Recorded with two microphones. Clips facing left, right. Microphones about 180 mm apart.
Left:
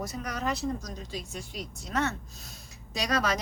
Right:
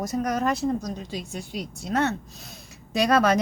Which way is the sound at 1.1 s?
65° right (ahead or behind).